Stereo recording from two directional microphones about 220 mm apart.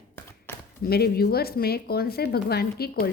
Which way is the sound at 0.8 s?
45° left (ahead or behind).